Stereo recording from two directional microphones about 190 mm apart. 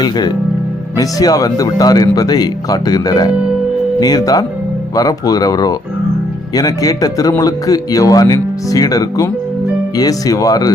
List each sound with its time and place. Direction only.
0.0 s a man's voice: 20° left (ahead or behind)